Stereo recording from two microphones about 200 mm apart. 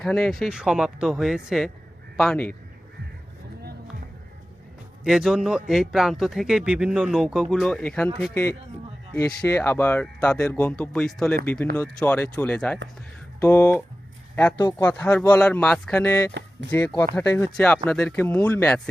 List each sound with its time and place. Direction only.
0.0 s a man's voice: centre (ahead or behind)
5.0 s a man's voice: centre (ahead or behind)